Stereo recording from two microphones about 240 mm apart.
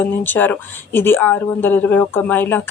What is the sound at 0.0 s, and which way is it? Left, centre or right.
Speech, centre.